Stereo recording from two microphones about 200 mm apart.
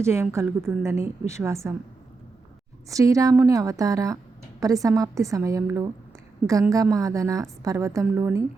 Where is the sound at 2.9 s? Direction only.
15° right (ahead or behind).